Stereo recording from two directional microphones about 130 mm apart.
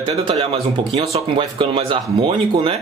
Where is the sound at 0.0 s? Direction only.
45° right (ahead or behind).